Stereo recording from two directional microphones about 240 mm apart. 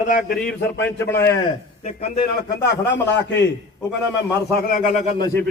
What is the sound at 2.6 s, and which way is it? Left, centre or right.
Speech, left.